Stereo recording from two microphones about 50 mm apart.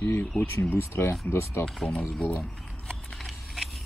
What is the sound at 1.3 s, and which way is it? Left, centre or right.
Speech, left.